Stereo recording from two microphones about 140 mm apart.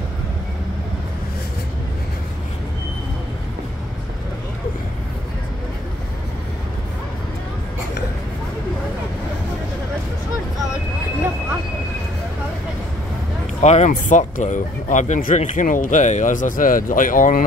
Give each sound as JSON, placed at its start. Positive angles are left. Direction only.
{"t": 13.6, "sound": "speech", "side_deg": 50}